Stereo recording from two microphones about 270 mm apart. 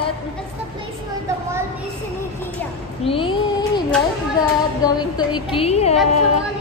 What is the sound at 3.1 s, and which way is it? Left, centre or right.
Music, centre.